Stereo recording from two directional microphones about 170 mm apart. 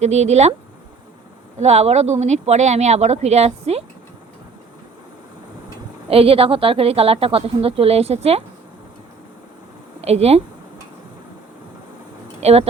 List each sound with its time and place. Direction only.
0.0 s a woman's voice: 40° right (ahead or behind)
1.5 s a woman's voice: 40° right (ahead or behind)
6.1 s a woman's voice: 35° right (ahead or behind)
10.0 s a woman's voice: 40° right (ahead or behind)
12.4 s speech: 40° right (ahead or behind)